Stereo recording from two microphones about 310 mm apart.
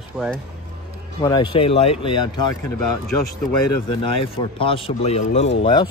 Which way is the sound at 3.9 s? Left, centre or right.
Centre.